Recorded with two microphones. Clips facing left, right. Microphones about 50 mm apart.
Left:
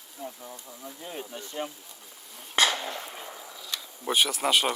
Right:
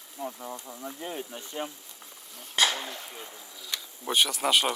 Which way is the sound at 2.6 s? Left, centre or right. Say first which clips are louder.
Left 2 dB; left.